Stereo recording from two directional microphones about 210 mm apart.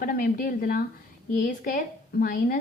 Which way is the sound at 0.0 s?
45° left (ahead or behind).